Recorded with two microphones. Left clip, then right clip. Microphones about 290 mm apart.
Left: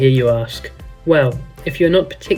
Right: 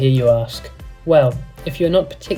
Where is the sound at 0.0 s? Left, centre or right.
Centre.